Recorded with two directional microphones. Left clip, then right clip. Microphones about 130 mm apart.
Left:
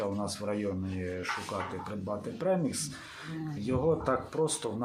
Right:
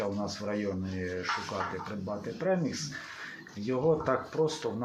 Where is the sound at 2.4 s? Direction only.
15° left (ahead or behind).